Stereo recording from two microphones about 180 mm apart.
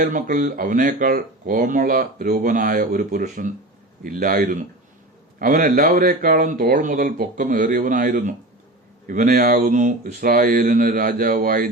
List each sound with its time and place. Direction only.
0.0 s speech: 50° right (ahead or behind)